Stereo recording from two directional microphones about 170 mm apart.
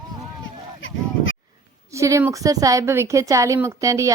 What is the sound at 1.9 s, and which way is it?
Speech, 15° right (ahead or behind).